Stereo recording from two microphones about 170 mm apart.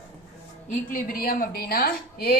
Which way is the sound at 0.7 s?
55° left (ahead or behind).